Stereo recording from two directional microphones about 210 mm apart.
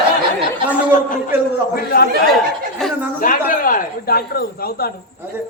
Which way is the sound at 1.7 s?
45° left (ahead or behind).